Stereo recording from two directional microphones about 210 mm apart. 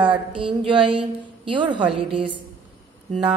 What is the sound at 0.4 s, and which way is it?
A woman's voice, 25° right (ahead or behind).